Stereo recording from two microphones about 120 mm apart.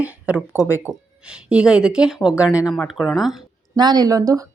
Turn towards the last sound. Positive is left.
turn(degrees=-30)  # may be behind; listen again after turning